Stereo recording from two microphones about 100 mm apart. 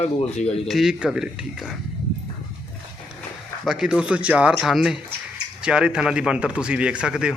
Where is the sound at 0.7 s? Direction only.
5° right (ahead or behind).